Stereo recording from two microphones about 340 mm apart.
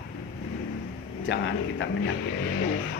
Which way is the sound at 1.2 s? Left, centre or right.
Left.